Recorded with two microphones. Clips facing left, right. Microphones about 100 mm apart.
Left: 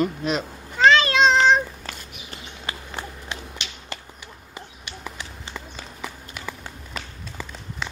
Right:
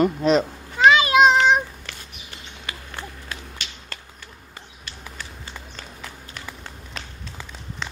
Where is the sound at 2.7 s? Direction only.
30° left (ahead or behind).